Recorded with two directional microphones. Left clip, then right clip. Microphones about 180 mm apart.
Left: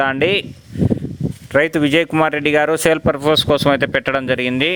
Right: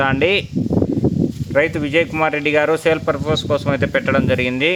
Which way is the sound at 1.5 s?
40° left (ahead or behind).